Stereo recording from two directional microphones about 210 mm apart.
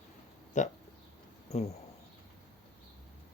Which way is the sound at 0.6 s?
35° left (ahead or behind).